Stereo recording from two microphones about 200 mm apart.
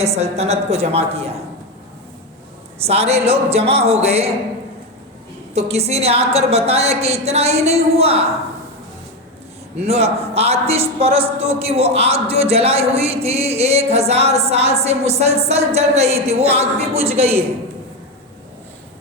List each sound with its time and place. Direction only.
0.0 s speech: 30° right (ahead or behind)
2.7 s speech: 30° right (ahead or behind)
5.5 s speech: 30° right (ahead or behind)
9.8 s speech: 30° right (ahead or behind)